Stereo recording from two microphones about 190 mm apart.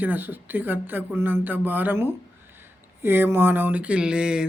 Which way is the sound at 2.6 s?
10° right (ahead or behind).